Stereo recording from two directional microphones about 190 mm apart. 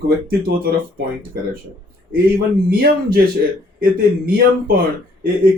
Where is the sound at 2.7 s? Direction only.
55° right (ahead or behind).